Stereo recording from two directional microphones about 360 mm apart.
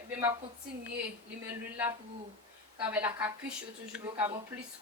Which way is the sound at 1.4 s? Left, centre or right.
Centre.